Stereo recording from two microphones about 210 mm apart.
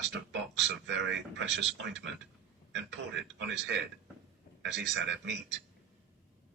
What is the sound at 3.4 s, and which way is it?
Speech, 60° right (ahead or behind).